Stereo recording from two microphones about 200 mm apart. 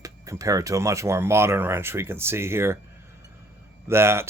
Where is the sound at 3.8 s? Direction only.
10° right (ahead or behind).